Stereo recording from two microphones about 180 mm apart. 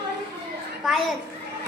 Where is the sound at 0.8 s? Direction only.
Centre (ahead or behind).